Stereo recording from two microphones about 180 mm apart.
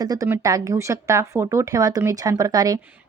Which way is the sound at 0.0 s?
20° right (ahead or behind).